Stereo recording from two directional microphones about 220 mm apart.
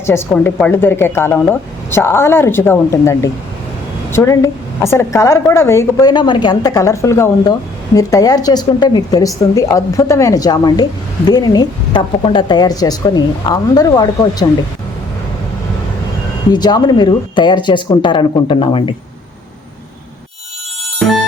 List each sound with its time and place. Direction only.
0.0 s speech: 10° left (ahead or behind)
16.5 s speech: 20° left (ahead or behind)